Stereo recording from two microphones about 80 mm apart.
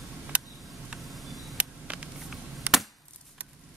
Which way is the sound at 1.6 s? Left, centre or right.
Centre.